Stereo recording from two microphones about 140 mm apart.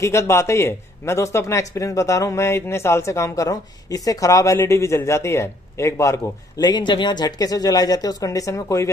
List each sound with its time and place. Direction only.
0.0 s a man's voice: 20° left (ahead or behind)